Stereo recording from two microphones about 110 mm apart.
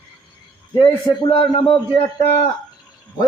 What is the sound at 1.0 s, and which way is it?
Speech, 40° left (ahead or behind).